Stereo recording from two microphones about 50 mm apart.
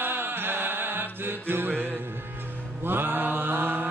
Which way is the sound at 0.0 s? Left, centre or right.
Right.